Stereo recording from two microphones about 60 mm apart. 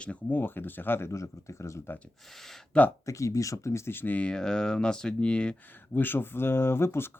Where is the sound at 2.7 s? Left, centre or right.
Left.